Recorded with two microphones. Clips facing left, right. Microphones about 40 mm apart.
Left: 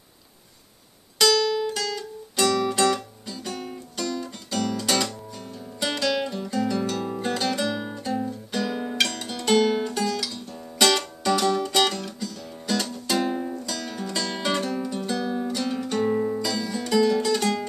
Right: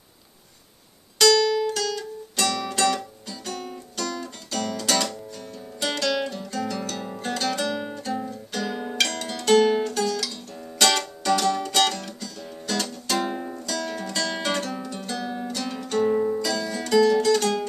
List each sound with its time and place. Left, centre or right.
1.1 s music: centre
9.8 s music: centre